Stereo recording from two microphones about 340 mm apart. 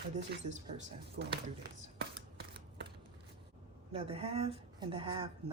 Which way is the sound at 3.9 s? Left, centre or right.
Centre.